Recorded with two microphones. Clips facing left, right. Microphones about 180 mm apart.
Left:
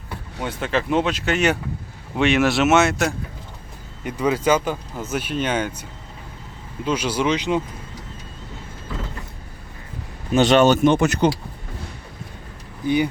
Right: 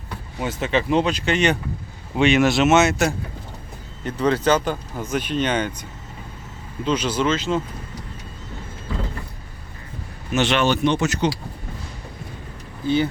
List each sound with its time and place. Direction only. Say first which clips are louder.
0.3 s speech: right 1 dB; 5° right (ahead or behind)
4.0 s speech: right 1 dB; 10° left (ahead or behind)
6.8 s speech: even; 10° left (ahead or behind)
10.3 s speech: left 5 dB; 40° left (ahead or behind); by 11.3 s 55° left (ahead or behind)
12.8 s speech: even; 15° left (ahead or behind)